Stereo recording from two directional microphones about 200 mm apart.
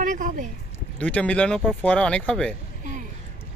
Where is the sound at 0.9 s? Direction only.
5° left (ahead or behind).